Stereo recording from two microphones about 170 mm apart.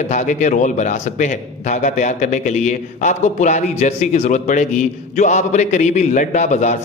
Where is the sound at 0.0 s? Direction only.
45° left (ahead or behind).